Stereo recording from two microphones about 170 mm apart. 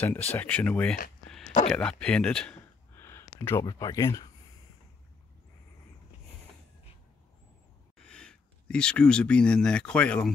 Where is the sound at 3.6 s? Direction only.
20° left (ahead or behind).